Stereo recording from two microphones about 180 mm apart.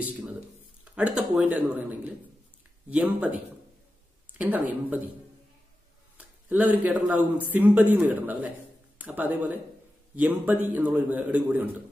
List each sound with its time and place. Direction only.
0.9 s speech: 5° right (ahead or behind)
6.1 s speech: 10° right (ahead or behind)